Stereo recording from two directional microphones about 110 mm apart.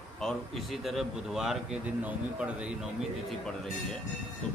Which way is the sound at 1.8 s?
15° right (ahead or behind).